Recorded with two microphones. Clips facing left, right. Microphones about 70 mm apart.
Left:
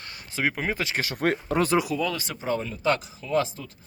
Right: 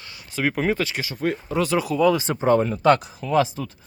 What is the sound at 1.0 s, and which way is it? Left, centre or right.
Speech, left.